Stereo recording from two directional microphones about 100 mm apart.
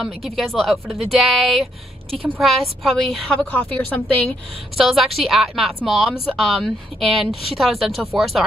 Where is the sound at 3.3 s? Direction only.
15° left (ahead or behind).